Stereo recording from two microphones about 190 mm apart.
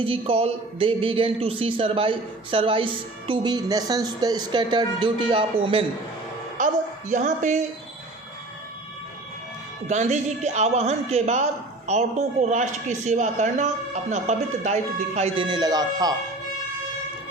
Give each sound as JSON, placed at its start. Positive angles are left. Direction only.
{"t": 0.0, "sound": "a man's voice", "side_deg": -30}
{"t": 6.6, "sound": "speech", "side_deg": -40}
{"t": 9.9, "sound": "speech", "side_deg": -35}